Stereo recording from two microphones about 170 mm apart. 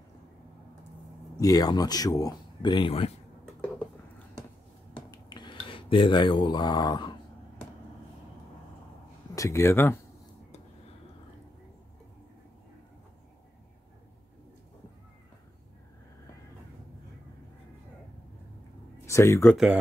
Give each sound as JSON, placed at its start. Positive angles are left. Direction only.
{"t": 1.4, "sound": "speech", "side_deg": 20}
{"t": 5.1, "sound": "a sound", "side_deg": 25}
{"t": 9.3, "sound": "speech", "side_deg": 15}
{"t": 19.0, "sound": "speech", "side_deg": 15}
{"t": 19.5, "sound": "speech", "side_deg": -5}